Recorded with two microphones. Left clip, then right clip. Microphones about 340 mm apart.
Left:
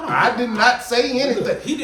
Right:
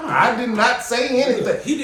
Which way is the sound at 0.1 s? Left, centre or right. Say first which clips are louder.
Right 1 dB; centre.